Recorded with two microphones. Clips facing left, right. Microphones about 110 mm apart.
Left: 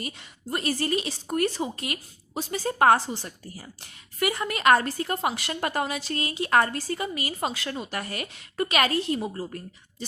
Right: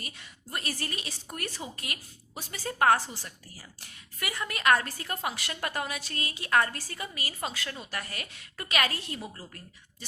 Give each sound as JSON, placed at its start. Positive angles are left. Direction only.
{"t": 0.0, "sound": "speech", "side_deg": 25}